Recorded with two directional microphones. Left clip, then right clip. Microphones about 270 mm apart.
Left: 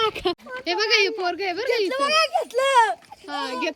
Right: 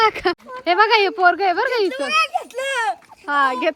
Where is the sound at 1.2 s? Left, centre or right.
Centre.